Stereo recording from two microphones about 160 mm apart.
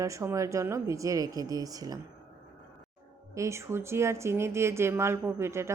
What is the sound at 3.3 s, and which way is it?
Speech, 20° right (ahead or behind).